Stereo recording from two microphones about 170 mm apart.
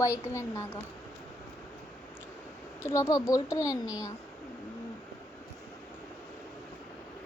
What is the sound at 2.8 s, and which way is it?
A child's voice, 15° left (ahead or behind).